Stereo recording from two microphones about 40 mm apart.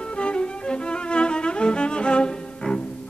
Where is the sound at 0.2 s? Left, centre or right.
Left.